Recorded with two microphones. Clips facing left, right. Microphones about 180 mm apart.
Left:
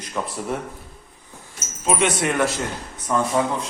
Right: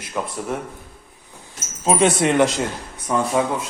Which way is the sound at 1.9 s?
30° right (ahead or behind).